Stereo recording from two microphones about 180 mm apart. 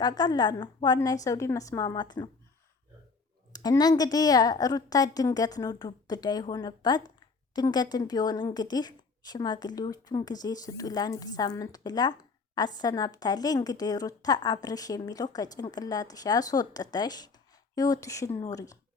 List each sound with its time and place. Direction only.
0.0 s speech: 20° left (ahead or behind)
3.5 s speech: 20° left (ahead or behind)